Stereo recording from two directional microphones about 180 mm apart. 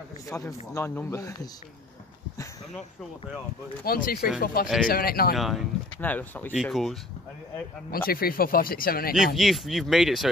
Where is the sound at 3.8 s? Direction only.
50° left (ahead or behind).